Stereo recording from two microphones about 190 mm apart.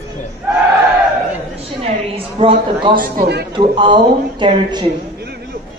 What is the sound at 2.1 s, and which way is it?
Speech, 25° right (ahead or behind).